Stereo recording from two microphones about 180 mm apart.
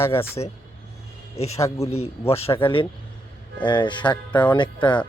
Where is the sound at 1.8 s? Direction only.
35° left (ahead or behind).